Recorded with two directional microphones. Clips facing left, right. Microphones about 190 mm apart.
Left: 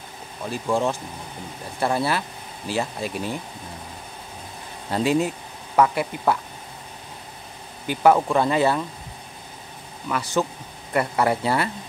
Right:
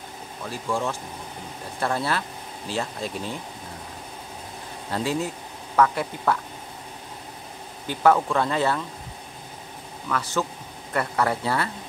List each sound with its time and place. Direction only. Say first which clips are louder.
0.5 s speech: left 4 dB; 20° left (ahead or behind)
1.8 s speech: left 3 dB; 10° left (ahead or behind)
4.9 s speech: left 5 dB; 15° left (ahead or behind)
7.8 s speech: left 2 dB; 10° left (ahead or behind)
10.0 s speech: left 3 dB; 15° left (ahead or behind)